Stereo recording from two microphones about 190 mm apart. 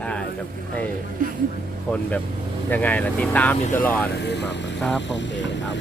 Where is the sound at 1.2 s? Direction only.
45° right (ahead or behind).